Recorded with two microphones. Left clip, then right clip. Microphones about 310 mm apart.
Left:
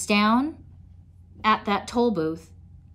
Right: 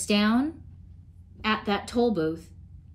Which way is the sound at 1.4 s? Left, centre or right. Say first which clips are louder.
Left 5 dB; centre.